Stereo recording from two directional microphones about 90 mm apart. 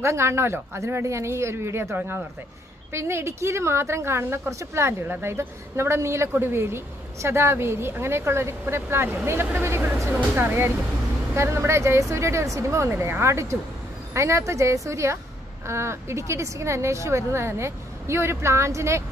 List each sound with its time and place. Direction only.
0.0 s a woman's voice: 30° right (ahead or behind)